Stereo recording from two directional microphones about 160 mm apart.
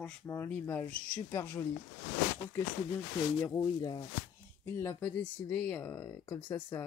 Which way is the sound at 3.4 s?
25° left (ahead or behind).